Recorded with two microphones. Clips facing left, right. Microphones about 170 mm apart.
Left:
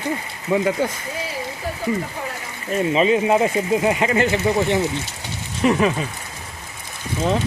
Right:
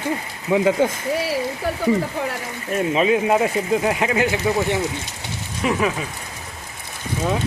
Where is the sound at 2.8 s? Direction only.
Centre (ahead or behind).